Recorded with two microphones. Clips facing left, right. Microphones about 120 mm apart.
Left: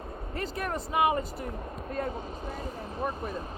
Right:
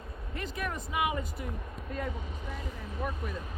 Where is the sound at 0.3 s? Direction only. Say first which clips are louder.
Left 3 dB; 40° left (ahead or behind).